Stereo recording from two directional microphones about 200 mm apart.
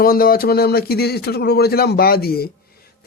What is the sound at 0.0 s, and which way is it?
Speech, 45° left (ahead or behind).